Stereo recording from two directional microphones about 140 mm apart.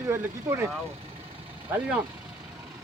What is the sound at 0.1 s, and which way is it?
Speech, 20° right (ahead or behind).